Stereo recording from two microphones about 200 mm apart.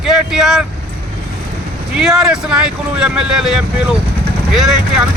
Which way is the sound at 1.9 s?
Centre (ahead or behind).